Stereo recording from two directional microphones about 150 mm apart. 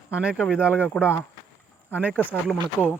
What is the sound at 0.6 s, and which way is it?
Speech, 15° left (ahead or behind).